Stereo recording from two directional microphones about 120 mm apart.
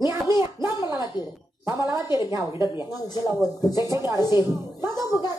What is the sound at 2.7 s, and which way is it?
A child's voice, 35° left (ahead or behind).